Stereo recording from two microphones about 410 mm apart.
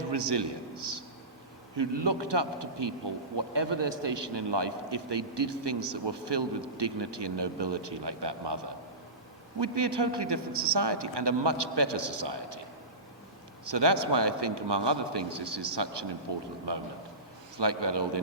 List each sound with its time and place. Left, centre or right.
0.1 s a man's voice: right
1.7 s a man's voice: right
13.7 s a man's voice: right